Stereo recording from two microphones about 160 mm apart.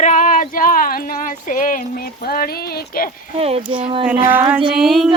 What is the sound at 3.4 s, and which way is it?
Speech, 40° right (ahead or behind).